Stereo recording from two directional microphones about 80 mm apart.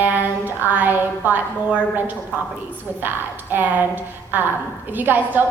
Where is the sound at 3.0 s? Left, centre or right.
Right.